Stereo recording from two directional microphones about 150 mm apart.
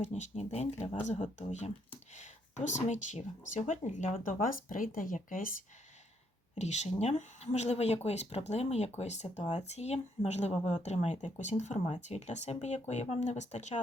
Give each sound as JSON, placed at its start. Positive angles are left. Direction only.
{"t": 0.0, "sound": "speech", "side_deg": 50}
{"t": 6.6, "sound": "speech", "side_deg": 50}